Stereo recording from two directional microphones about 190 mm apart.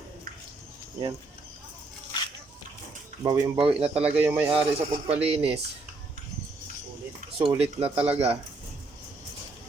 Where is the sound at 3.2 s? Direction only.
25° right (ahead or behind).